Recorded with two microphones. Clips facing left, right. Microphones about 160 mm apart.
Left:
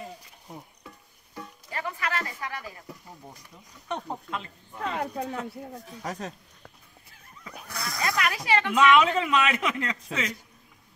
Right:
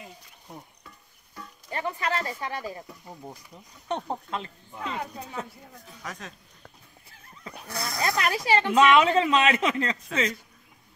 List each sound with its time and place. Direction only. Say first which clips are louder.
1.7 s a sound: right 3 dB; 30° right (ahead or behind)
3.9 s speech: right 2 dB; 30° right (ahead or behind)
4.7 s speech: left 3 dB; 50° left (ahead or behind)
6.0 s speech: left 5 dB; 35° left (ahead or behind)
7.6 s speech: right 2 dB; 25° right (ahead or behind)